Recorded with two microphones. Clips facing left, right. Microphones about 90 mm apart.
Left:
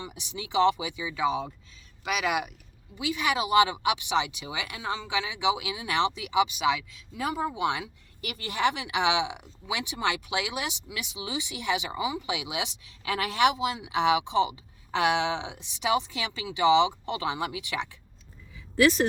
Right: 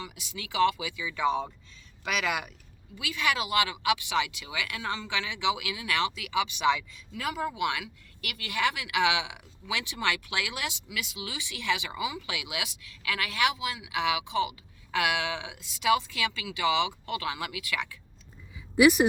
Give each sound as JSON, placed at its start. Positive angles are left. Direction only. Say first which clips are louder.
{"t": 0.0, "sound": "speech", "louder": "left 2 dB", "side_deg": 25}
{"t": 1.2, "sound": "speech", "louder": "even", "side_deg": 5}
{"t": 2.0, "sound": "speech", "louder": "left 2 dB", "side_deg": 15}
{"t": 6.6, "sound": "speech", "louder": "even", "side_deg": 5}
{"t": 7.1, "sound": "speech", "louder": "left 2 dB", "side_deg": 25}
{"t": 18.8, "sound": "speech", "louder": "right 2 dB", "side_deg": -15}